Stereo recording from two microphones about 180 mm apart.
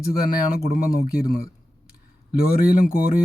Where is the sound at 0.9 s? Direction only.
55° left (ahead or behind).